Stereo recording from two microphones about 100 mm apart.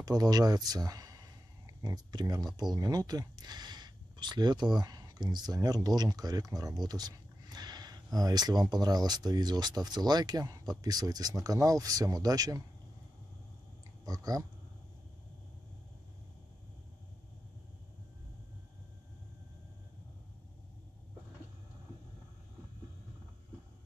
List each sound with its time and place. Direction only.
0.0 s a man's voice: 40° right (ahead or behind)
14.0 s speech: 35° right (ahead or behind)